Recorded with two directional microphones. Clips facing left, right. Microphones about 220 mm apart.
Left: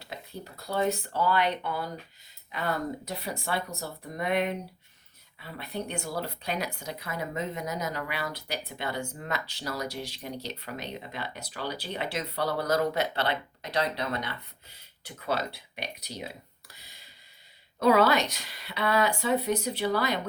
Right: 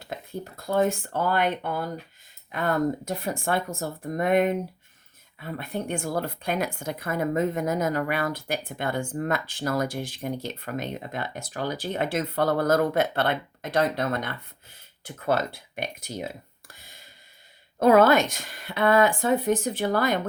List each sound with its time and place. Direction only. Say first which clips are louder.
0.0 s a woman's voice: right 6 dB; 50° right (ahead or behind)